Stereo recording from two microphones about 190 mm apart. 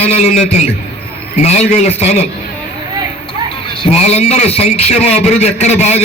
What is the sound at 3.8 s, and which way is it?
A man's voice, 35° left (ahead or behind).